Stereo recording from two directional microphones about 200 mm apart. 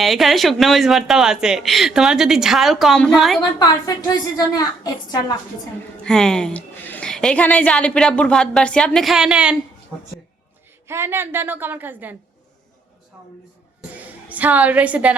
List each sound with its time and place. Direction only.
0.0 s a woman's voice: centre (ahead or behind)
3.6 s a woman's voice: 20° left (ahead or behind)
6.0 s a woman's voice: 5° left (ahead or behind)
10.8 s a woman's voice: 10° right (ahead or behind)
13.9 s a woman's voice: 10° right (ahead or behind)